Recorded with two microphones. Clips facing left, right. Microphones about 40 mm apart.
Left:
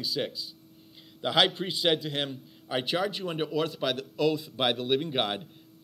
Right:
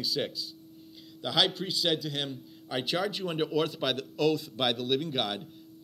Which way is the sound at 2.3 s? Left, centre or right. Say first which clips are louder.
Left 2 dB; centre.